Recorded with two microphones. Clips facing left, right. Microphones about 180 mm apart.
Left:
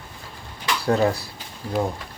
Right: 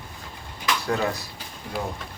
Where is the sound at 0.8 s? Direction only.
35° left (ahead or behind).